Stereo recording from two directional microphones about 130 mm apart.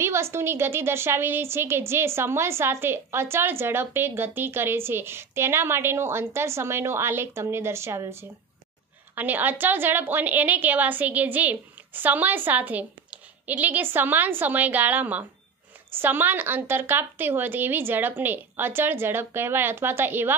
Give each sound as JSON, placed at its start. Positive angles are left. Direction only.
{"t": 0.0, "sound": "a woman's voice", "side_deg": -20}